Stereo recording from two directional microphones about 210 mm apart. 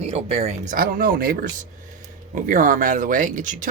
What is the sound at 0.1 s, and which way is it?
Speech, 30° right (ahead or behind).